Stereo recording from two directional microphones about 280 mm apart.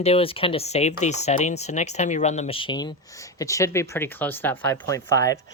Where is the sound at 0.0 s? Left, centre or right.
Left.